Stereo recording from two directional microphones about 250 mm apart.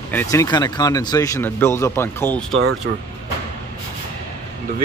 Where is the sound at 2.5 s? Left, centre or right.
Right.